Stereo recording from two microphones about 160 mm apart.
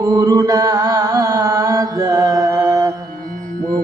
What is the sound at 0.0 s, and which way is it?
Chant, 20° right (ahead or behind).